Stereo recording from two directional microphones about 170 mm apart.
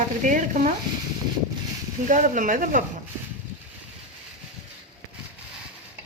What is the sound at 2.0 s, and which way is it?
Speech, 50° right (ahead or behind).